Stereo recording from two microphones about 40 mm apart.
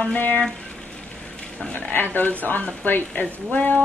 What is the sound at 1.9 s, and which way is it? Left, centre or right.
Speech, left.